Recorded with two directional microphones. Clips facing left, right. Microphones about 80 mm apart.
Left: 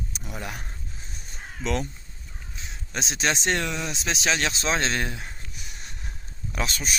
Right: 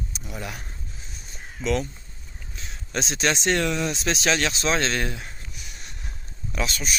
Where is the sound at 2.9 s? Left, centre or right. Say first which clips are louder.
Right 2 dB; centre.